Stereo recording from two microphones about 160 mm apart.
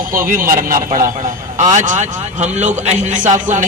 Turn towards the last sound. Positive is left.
turn(degrees=-50)  # may be behind; listen again after turning